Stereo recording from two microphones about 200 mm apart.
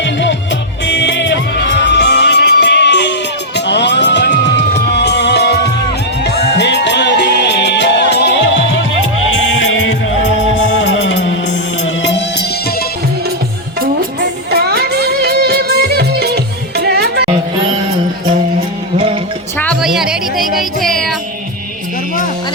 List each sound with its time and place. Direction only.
0.0 s music: 65° left (ahead or behind)
9.6 s music: 70° left (ahead or behind)
14.5 s music: 50° right (ahead or behind)
19.8 s a sound: centre (ahead or behind)
20.6 s music: centre (ahead or behind)